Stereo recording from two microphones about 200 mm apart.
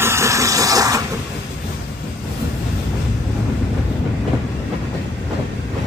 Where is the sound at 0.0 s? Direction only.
15° right (ahead or behind).